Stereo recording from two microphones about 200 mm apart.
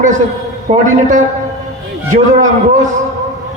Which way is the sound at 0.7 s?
40° right (ahead or behind).